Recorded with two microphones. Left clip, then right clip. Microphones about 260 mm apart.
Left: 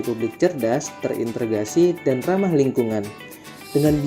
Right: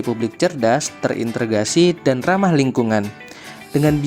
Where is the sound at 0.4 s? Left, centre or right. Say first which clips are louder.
Right 4 dB; right.